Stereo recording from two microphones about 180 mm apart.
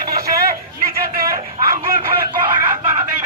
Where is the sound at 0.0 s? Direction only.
60° right (ahead or behind).